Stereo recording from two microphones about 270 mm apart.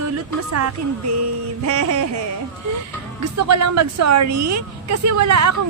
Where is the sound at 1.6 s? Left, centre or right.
Right.